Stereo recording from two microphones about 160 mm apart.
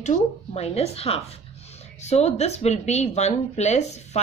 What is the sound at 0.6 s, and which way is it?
A woman's voice, 40° left (ahead or behind).